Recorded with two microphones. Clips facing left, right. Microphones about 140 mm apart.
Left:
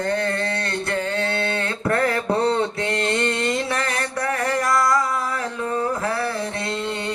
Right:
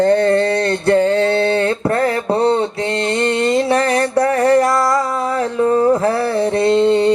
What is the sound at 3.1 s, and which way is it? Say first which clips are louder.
Mantra: right 7 dB; 30° right (ahead or behind).